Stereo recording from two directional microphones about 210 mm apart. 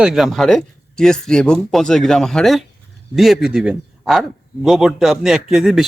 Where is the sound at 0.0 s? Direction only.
Centre (ahead or behind).